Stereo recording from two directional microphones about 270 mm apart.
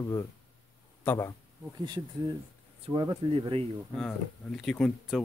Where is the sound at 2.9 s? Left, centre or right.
Centre.